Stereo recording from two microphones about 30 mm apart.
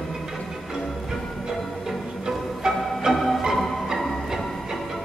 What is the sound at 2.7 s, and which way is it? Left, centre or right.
Music, right.